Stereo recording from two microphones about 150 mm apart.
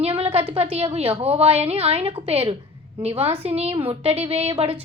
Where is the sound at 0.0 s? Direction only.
40° right (ahead or behind).